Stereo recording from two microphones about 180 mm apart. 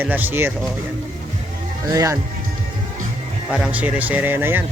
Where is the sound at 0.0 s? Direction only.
10° right (ahead or behind).